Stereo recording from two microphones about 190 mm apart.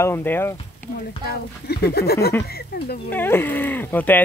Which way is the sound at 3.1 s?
10° left (ahead or behind).